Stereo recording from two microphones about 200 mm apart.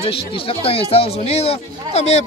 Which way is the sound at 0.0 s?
30° left (ahead or behind).